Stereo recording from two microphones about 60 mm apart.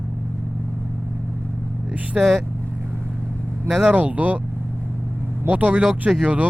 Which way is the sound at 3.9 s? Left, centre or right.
Right.